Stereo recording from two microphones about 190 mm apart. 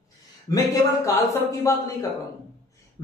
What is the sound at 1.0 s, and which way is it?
Speech, 15° left (ahead or behind).